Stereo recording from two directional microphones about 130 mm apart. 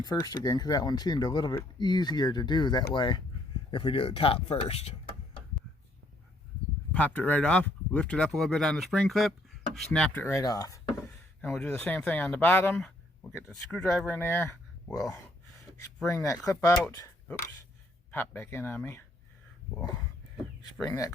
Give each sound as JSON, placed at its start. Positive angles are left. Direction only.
{"t": 0.0, "sound": "speech", "side_deg": 30}
{"t": 6.9, "sound": "speech", "side_deg": 10}
{"t": 10.2, "sound": "speech", "side_deg": 25}
{"t": 11.0, "sound": "a sound", "side_deg": 5}
{"t": 11.6, "sound": "speech", "side_deg": 15}
{"t": 16.1, "sound": "speech", "side_deg": 25}
{"t": 18.1, "sound": "speech", "side_deg": 15}
{"t": 20.8, "sound": "speech", "side_deg": 25}